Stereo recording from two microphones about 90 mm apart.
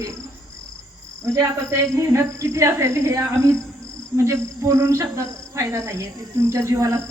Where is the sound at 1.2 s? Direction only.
35° right (ahead or behind).